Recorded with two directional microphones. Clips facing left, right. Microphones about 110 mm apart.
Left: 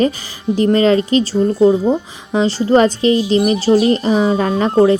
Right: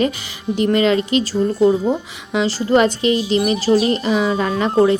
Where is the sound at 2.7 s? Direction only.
35° left (ahead or behind).